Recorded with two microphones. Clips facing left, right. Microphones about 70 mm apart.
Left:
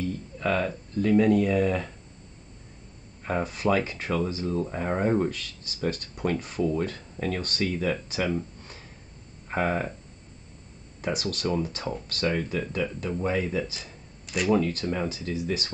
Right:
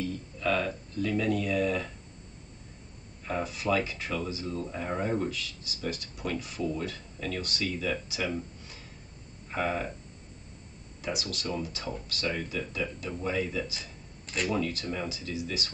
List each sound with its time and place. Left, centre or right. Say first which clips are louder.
0.4 s speech: left 2 dB; left
3.3 s speech: left 4 dB; left
11.0 s speech: left 5 dB; left